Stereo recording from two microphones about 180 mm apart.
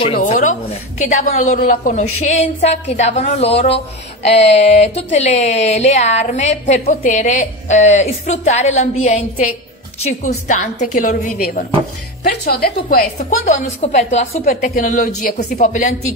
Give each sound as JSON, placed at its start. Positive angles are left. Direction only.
{"t": 0.2, "sound": "a woman's voice", "side_deg": 45}
{"t": 12.2, "sound": "a woman's voice", "side_deg": 65}
{"t": 13.4, "sound": "a woman's voice", "side_deg": 40}